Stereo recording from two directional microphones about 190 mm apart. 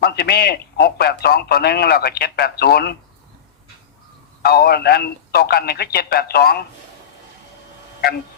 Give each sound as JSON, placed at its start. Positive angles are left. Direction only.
{"t": 0.0, "sound": "a man's voice", "side_deg": 55}
{"t": 4.4, "sound": "a man's voice", "side_deg": 55}